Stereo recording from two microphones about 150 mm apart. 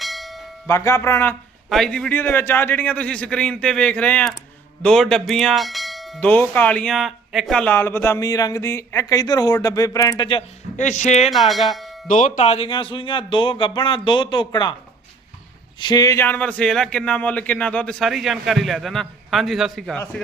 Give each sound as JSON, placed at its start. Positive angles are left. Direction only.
{"t": 0.0, "sound": "bell", "side_deg": 0}
{"t": 0.7, "sound": "speech", "side_deg": 20}
{"t": 1.7, "sound": "speech", "side_deg": 5}
{"t": 4.8, "sound": "bell", "side_deg": 5}
{"t": 6.1, "sound": "speech", "side_deg": 10}
{"t": 10.8, "sound": "speech", "side_deg": 55}
{"t": 11.3, "sound": "speech", "side_deg": 0}
{"t": 12.0, "sound": "speech", "side_deg": 60}
{"t": 15.8, "sound": "speech", "side_deg": 25}
{"t": 16.2, "sound": "speech", "side_deg": 10}